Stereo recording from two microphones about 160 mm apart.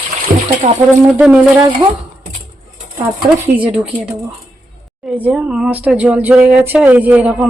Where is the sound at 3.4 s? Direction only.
10° right (ahead or behind).